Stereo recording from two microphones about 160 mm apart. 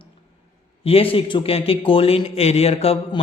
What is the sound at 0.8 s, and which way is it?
Speech, 35° left (ahead or behind).